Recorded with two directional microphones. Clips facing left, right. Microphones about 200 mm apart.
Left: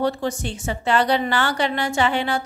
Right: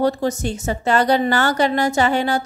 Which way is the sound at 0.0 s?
40° right (ahead or behind).